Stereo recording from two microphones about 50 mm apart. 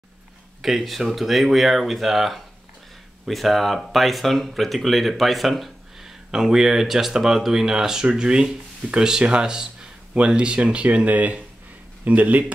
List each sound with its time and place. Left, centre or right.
0.6 s speech: centre
6.0 s speech: centre; by 12.5 s right